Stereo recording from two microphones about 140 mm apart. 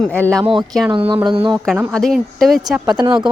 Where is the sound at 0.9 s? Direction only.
35° right (ahead or behind).